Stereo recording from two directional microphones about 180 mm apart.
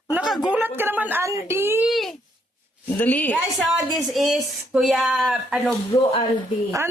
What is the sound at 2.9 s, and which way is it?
A woman's voice, 10° left (ahead or behind).